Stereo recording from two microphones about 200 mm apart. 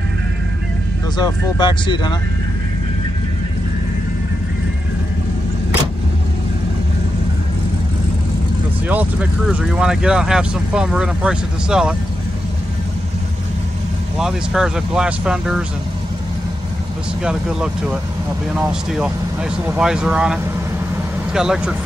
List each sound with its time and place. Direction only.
1.1 s speech: 20° left (ahead or behind)
8.8 s speech: 5° right (ahead or behind)
14.1 s speech: 5° right (ahead or behind)
17.2 s speech: 5° right (ahead or behind)